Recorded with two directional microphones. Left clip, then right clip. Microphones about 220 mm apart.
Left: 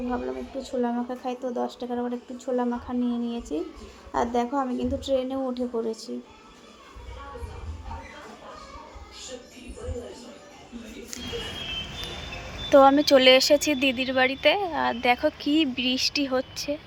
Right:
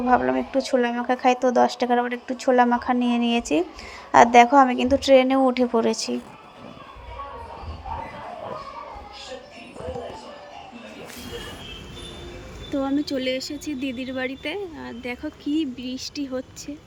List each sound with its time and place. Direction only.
0.1 s a woman's voice: 30° right (ahead or behind)
12.7 s speech: 5° right (ahead or behind)